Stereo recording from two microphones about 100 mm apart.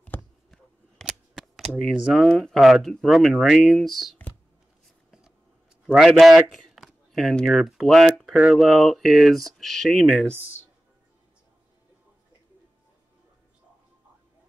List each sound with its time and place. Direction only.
0.1 s a sound: 20° left (ahead or behind)
0.5 s speech: centre (ahead or behind)
5.9 s speech: centre (ahead or behind)